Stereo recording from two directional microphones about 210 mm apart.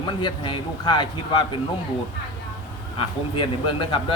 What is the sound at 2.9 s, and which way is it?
Speech, 25° left (ahead or behind).